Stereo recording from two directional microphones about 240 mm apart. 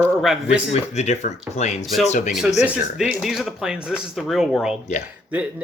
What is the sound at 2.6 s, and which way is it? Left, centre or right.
Speech, centre.